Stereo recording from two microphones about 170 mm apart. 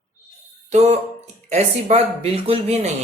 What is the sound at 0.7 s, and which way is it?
Speech, 40° right (ahead or behind).